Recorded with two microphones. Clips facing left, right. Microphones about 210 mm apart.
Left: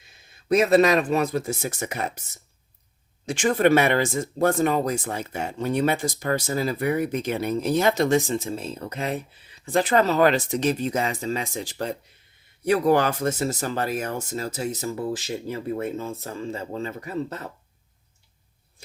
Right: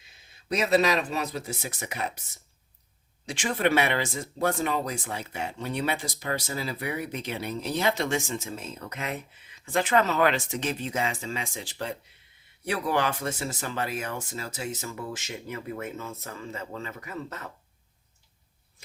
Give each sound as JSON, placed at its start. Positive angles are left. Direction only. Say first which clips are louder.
{"t": 0.4, "sound": "speech", "louder": "left 6 dB", "side_deg": 50}
{"t": 3.2, "sound": "speech", "louder": "left 7 dB", "side_deg": 45}